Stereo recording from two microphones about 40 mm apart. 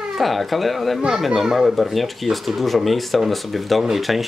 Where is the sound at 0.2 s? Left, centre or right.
Centre.